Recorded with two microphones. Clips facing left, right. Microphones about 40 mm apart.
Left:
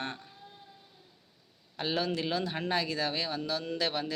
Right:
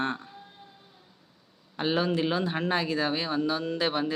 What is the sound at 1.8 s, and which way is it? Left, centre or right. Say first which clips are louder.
Speech: right 5 dB; centre.